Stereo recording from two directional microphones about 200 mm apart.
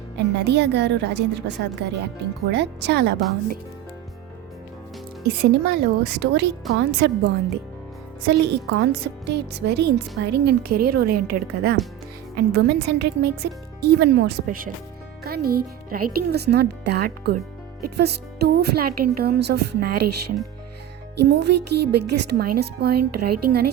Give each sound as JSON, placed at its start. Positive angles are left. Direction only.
{"t": 0.3, "sound": "a woman's voice", "side_deg": -55}
{"t": 5.4, "sound": "a woman's voice", "side_deg": -50}
{"t": 8.3, "sound": "a woman's voice", "side_deg": -55}
{"t": 21.2, "sound": "a woman's voice", "side_deg": -60}